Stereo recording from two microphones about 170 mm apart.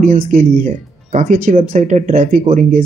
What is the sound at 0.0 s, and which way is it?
Speech, 50° right (ahead or behind).